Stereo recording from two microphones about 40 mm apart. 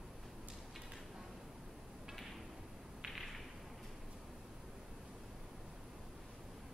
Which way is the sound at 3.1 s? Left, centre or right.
Centre.